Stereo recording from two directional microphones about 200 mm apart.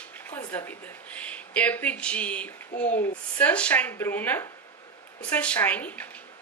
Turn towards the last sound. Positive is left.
turn(degrees=10)  # may be behind; listen again after turning